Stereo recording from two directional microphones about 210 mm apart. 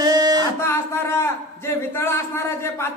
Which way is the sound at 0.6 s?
10° left (ahead or behind).